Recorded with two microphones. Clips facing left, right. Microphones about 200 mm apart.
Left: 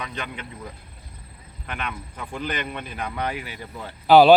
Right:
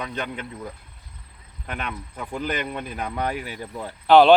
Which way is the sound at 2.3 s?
40° right (ahead or behind).